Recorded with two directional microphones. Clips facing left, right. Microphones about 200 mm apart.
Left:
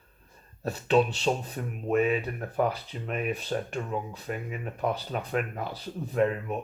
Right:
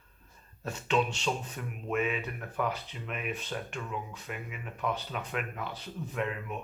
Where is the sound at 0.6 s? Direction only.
35° left (ahead or behind).